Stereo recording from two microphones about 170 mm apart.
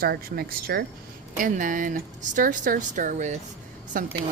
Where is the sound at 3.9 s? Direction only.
55° right (ahead or behind).